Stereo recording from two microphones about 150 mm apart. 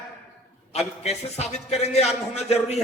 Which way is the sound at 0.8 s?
45° left (ahead or behind).